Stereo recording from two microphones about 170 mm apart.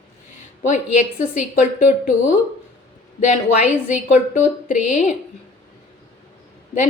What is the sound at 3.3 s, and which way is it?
Speech, 45° left (ahead or behind).